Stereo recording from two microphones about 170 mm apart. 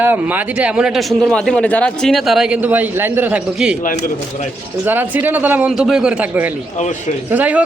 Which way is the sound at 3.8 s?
50° left (ahead or behind).